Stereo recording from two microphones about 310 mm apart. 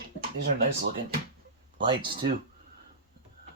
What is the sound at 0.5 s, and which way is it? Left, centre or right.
Speech, right.